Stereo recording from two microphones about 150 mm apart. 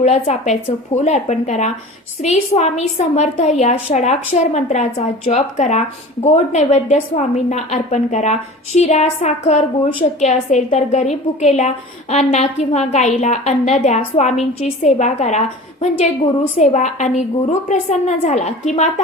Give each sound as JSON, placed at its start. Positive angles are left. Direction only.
{"t": 0.0, "sound": "a woman's voice", "side_deg": 50}